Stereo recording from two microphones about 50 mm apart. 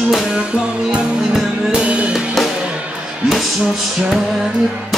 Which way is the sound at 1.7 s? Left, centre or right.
Right.